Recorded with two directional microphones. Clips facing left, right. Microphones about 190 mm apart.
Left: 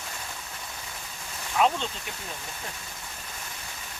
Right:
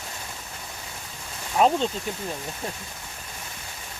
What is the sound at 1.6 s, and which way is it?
Speech, 35° right (ahead or behind).